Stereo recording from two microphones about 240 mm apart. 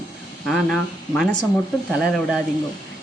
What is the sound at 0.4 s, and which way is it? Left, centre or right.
Speech, centre.